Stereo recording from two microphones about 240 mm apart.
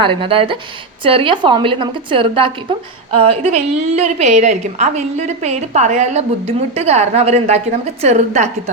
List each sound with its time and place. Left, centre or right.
0.0 s a woman's voice: right